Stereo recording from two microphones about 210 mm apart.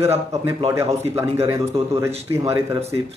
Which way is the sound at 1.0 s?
30° right (ahead or behind).